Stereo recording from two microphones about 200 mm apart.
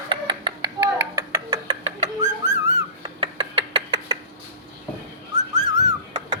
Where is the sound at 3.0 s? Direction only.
25° right (ahead or behind).